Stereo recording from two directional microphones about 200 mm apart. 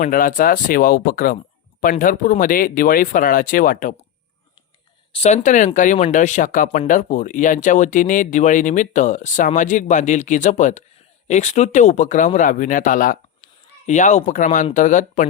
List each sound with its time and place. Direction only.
0.0 s speech: 45° left (ahead or behind)
5.1 s speech: 35° left (ahead or behind)